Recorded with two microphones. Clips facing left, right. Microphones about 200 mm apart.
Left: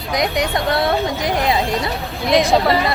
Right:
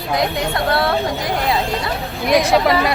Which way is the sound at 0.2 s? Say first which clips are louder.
Left 3 dB; 15° left (ahead or behind).